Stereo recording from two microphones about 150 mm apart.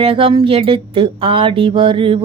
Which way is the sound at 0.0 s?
40° right (ahead or behind).